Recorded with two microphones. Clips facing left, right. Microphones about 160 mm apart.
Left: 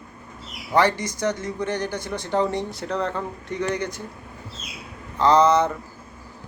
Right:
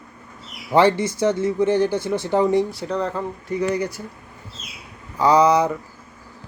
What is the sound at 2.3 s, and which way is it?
Speech, 15° right (ahead or behind).